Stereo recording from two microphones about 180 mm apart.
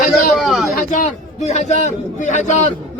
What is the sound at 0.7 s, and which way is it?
A man's voice, 50° left (ahead or behind).